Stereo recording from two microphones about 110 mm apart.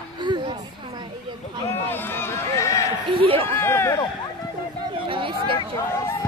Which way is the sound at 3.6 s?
20° left (ahead or behind).